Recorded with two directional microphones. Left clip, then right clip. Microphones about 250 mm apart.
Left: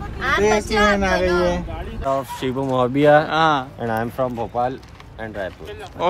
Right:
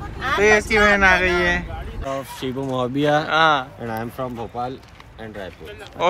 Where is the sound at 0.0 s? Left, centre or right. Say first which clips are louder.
Even; centre.